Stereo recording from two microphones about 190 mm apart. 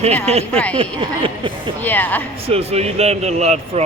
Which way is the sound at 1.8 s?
10° left (ahead or behind).